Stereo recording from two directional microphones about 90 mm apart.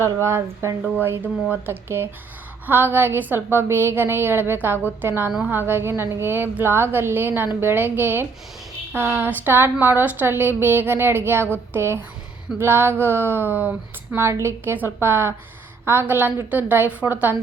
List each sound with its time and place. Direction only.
0.0 s speech: 30° right (ahead or behind)
0.9 s a woman's voice: 20° right (ahead or behind)